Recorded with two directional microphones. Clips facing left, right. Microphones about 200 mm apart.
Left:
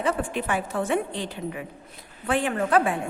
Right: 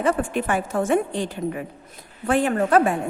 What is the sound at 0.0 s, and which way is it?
A woman's voice, 50° right (ahead or behind).